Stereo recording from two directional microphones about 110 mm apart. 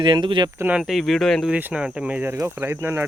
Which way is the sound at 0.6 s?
15° right (ahead or behind).